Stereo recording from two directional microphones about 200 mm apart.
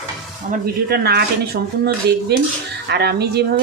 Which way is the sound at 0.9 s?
50° right (ahead or behind).